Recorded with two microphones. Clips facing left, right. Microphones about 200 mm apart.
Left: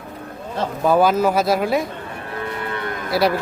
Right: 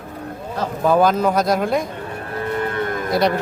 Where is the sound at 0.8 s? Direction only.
5° left (ahead or behind).